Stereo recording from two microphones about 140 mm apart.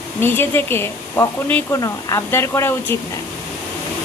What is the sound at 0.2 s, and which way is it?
Speech, 15° left (ahead or behind).